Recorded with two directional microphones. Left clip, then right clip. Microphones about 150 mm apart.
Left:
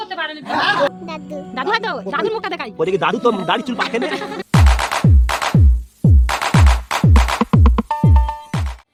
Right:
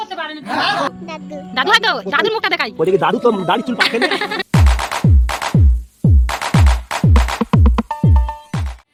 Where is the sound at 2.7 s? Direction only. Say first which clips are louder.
Even; 40° right (ahead or behind).